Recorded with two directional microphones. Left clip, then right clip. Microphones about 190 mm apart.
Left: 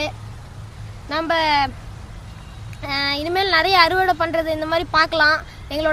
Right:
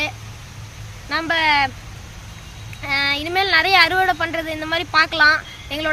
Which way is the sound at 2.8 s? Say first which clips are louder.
Right 2 dB; 50° left (ahead or behind).